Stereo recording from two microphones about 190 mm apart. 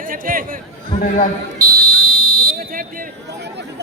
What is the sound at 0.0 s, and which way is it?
Chatter, 45° right (ahead or behind).